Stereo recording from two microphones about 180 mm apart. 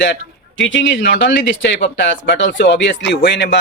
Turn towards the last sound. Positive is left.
turn(degrees=70)  # may be behind; listen again after turning